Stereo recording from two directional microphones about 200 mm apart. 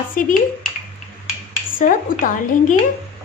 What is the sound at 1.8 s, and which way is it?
Speech, 40° left (ahead or behind).